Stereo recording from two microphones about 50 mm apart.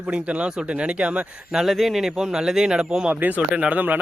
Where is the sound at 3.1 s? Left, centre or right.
Right.